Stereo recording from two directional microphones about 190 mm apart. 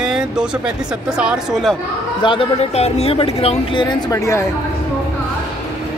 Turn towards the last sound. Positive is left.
turn(degrees=15)  # may be behind; listen again after turning